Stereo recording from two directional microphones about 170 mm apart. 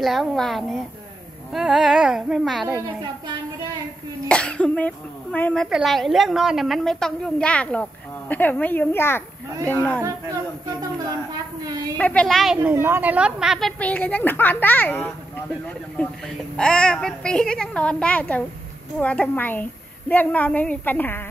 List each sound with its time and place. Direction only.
0.0 s a child's voice: centre (ahead or behind)
4.3 s speech: 5° left (ahead or behind)
10.8 s speech: 20° right (ahead or behind)
12.0 s a child's voice: 5° left (ahead or behind)
12.7 s a child's voice: 15° right (ahead or behind); by 21.2 s 10° left (ahead or behind)